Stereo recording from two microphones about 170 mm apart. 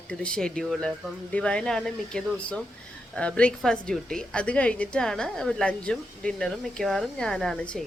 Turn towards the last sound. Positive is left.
turn(degrees=0)  # may be behind; listen again after turning